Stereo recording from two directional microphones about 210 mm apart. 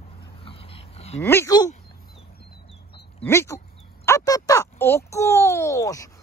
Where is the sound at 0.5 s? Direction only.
25° left (ahead or behind).